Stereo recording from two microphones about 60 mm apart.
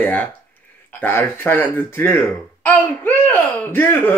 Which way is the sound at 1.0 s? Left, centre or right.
Left.